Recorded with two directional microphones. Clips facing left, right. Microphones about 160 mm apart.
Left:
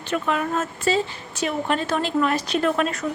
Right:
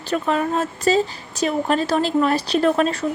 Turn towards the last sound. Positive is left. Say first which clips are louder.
# right 4 dB
turn(degrees=-30)  # may be behind; listen again after turning